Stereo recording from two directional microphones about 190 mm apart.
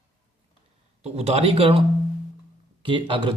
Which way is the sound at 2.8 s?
25° right (ahead or behind).